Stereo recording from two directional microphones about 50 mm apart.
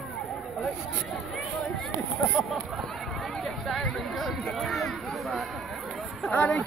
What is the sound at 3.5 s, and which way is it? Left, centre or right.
Speech, centre.